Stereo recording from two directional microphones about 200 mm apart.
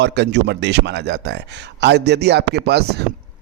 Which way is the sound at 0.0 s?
60° right (ahead or behind).